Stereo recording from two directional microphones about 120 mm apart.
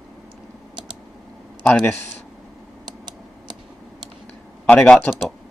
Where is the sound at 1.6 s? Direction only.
15° left (ahead or behind).